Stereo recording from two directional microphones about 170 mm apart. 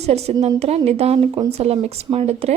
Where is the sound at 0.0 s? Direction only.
40° right (ahead or behind).